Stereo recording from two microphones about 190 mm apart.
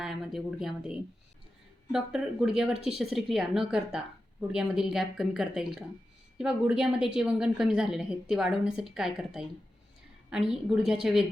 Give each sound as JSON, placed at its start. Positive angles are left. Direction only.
{"t": 0.0, "sound": "speech", "side_deg": 0}